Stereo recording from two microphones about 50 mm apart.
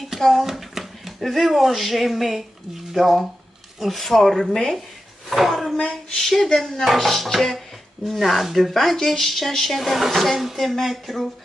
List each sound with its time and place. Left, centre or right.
0.0 s a child's voice: centre
5.7 s speech: centre